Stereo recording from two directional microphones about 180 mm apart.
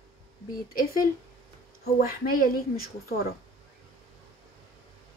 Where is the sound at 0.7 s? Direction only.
50° left (ahead or behind).